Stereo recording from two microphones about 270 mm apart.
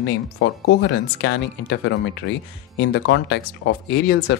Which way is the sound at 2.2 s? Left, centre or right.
Left.